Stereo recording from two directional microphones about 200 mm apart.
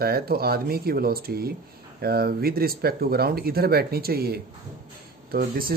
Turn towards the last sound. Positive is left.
turn(degrees=-45)  # may be behind; listen again after turning